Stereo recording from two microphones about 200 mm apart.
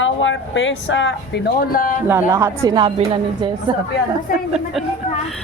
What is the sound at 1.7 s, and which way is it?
Speech, 45° left (ahead or behind).